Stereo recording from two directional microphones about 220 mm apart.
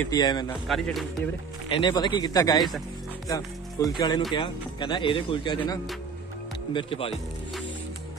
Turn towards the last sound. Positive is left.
turn(degrees=25)  # may be behind; listen again after turning